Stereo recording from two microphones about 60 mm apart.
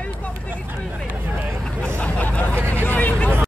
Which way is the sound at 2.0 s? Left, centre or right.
Left.